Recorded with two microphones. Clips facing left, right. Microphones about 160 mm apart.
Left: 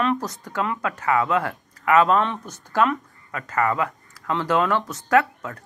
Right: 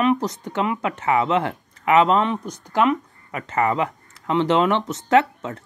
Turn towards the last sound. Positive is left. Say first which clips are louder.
# right 2 dB
turn(degrees=-25)  # may be behind; listen again after turning